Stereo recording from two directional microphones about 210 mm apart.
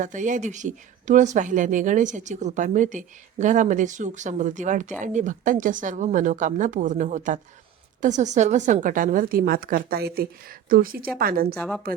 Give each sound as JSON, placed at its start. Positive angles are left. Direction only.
{"t": 0.0, "sound": "a woman's voice", "side_deg": -35}